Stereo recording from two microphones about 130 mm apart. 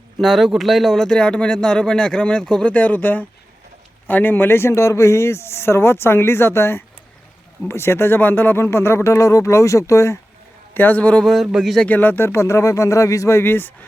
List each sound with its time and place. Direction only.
0.2 s speech: centre (ahead or behind)
11.9 s speech: 15° left (ahead or behind)